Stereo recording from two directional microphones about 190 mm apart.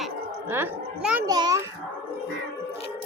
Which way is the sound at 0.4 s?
10° right (ahead or behind).